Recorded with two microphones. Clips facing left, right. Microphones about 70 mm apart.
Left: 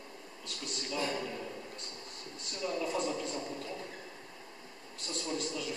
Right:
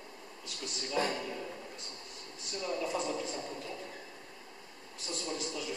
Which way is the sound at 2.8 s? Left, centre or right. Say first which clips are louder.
Left 1 dB; centre.